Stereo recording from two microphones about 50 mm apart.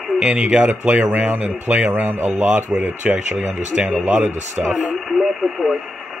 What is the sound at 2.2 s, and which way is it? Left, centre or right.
Speech, right.